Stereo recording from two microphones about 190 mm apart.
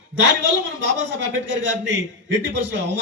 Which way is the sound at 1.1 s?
75° right (ahead or behind).